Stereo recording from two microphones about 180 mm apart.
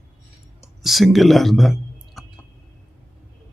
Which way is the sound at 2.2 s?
Centre (ahead or behind).